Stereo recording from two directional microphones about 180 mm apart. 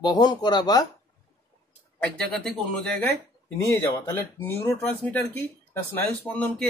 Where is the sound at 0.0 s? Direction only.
25° left (ahead or behind).